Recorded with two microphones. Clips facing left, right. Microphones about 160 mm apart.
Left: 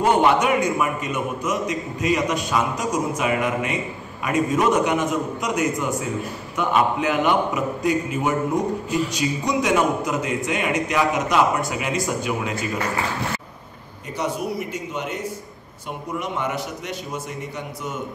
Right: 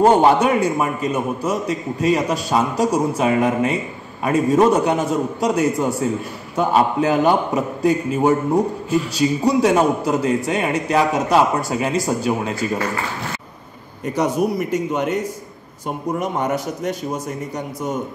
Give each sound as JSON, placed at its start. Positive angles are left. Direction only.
{"t": 0.0, "sound": "a man's voice", "side_deg": -35}
{"t": 14.1, "sound": "a man's voice", "side_deg": -45}